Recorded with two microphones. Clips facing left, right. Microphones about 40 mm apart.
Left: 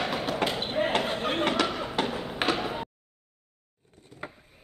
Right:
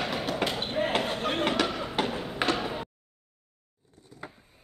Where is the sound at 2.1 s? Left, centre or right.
Centre.